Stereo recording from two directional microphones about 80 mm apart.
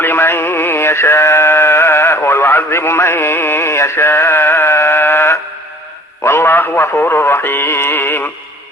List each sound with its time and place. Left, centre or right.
0.0 s synthetic singing: left
6.2 s a man's voice: left
7.1 s synthetic singing: left